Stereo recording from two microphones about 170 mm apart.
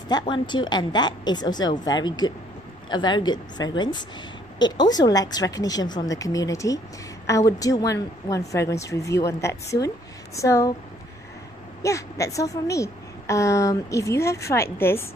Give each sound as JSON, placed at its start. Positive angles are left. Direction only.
{"t": 0.2, "sound": "a woman's voice", "side_deg": 25}
{"t": 11.8, "sound": "a woman's voice", "side_deg": 20}